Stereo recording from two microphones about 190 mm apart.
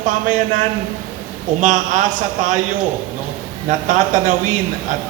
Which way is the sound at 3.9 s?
40° right (ahead or behind).